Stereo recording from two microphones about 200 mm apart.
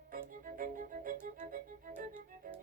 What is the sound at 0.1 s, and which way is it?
Music, 45° right (ahead or behind).